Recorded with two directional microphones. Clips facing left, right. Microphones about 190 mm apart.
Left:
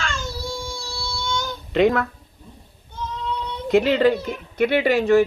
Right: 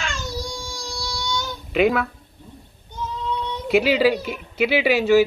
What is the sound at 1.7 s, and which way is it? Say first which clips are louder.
Speech: left 1 dB; 5° right (ahead or behind).